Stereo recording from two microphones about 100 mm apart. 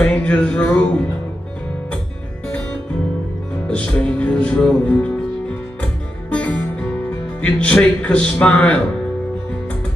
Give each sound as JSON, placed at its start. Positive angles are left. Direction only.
{"t": 0.0, "sound": "music", "side_deg": 10}
{"t": 3.6, "sound": "music", "side_deg": 10}
{"t": 6.3, "sound": "music", "side_deg": 15}